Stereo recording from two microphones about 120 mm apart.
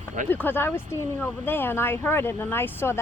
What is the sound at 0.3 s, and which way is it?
A woman's voice, 15° left (ahead or behind).